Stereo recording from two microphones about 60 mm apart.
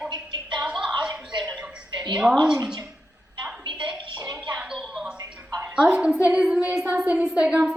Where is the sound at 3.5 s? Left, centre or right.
Centre.